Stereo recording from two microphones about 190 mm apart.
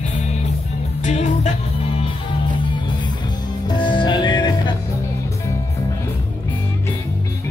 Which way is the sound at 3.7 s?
25° left (ahead or behind).